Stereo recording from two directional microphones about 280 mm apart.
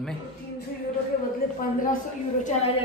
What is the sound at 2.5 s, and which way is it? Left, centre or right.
Speech, left.